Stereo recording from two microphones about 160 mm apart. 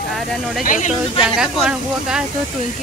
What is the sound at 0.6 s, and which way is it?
Speech, 55° left (ahead or behind).